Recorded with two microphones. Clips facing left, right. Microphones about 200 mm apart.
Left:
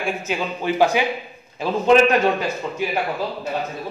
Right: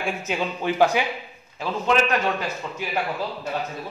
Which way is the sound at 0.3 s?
5° left (ahead or behind).